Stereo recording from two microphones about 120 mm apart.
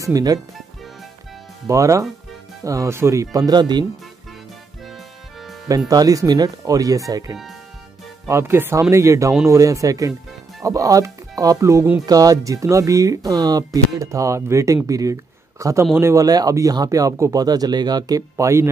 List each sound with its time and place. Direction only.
0.0 s speech: 30° right (ahead or behind)
1.7 s speech: 25° right (ahead or behind)
5.9 s speech: 30° right (ahead or behind)
18.3 s speech: 20° right (ahead or behind)